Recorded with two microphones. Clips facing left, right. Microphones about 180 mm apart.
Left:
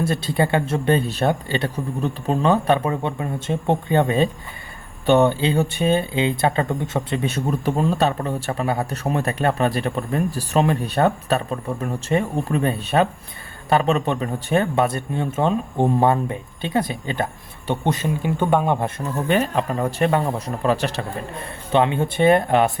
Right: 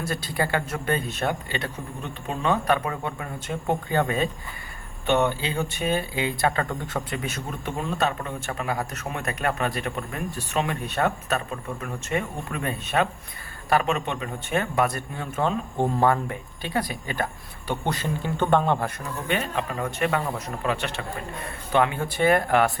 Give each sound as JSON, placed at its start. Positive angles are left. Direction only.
{"t": 0.0, "sound": "speech", "side_deg": 25}
{"t": 19.1, "sound": "speech", "side_deg": 40}
{"t": 21.4, "sound": "speech", "side_deg": 25}